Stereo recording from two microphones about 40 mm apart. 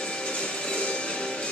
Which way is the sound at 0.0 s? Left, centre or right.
Left.